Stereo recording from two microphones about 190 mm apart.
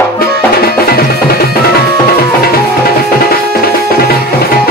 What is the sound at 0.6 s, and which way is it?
Music, 55° left (ahead or behind).